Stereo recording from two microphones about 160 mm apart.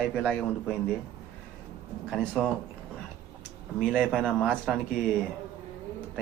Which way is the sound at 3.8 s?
5° left (ahead or behind).